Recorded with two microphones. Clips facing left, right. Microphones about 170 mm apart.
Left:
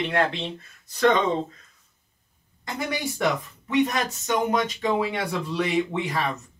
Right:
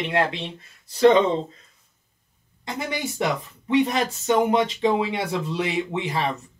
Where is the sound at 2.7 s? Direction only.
25° right (ahead or behind).